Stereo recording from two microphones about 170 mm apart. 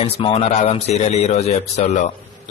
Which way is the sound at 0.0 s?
35° left (ahead or behind).